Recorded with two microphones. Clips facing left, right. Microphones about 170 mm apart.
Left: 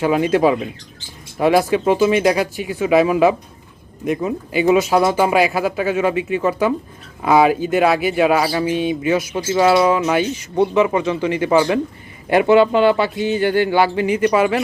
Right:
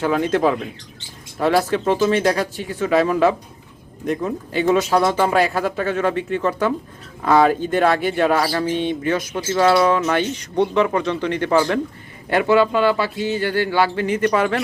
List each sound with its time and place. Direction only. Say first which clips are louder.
0.0 s speech: left 3 dB; 10° left (ahead or behind)